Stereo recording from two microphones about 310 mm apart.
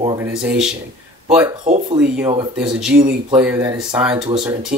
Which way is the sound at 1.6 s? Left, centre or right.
Right.